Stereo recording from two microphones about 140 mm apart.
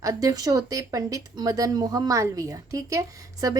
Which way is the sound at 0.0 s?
25° right (ahead or behind).